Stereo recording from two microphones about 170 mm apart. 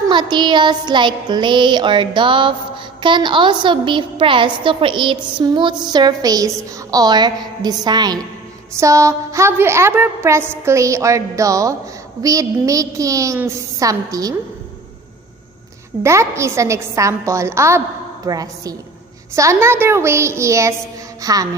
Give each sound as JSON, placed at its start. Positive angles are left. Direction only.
{"t": 0.1, "sound": "a woman's voice", "side_deg": -25}
{"t": 16.0, "sound": "a woman's voice", "side_deg": -15}
{"t": 21.2, "sound": "music", "side_deg": -20}